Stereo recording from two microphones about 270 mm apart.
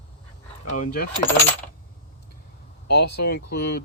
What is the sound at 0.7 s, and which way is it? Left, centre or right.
Speech, left.